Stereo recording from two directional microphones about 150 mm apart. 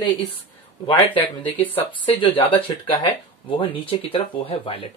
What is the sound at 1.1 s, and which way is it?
Speech, 10° left (ahead or behind).